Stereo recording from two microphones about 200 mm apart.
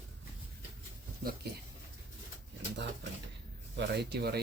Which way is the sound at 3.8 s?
55° right (ahead or behind).